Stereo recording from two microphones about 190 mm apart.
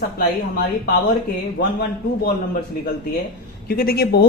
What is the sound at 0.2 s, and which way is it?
Speech, 55° left (ahead or behind).